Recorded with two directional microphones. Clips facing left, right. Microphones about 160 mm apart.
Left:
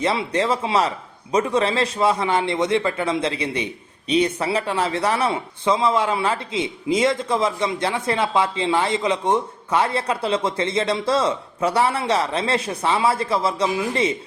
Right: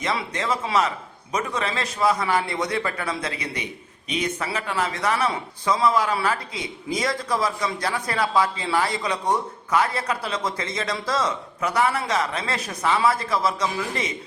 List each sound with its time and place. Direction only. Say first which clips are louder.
0.0 s speech: left 6 dB; 30° left (ahead or behind)